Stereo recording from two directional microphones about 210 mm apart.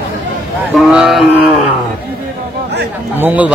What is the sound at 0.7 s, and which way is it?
Speech, centre (ahead or behind).